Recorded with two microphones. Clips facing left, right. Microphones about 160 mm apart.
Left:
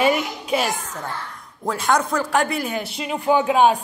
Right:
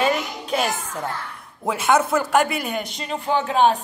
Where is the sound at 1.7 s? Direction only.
5° right (ahead or behind).